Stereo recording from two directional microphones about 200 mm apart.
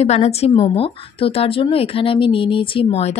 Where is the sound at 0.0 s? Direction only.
35° left (ahead or behind).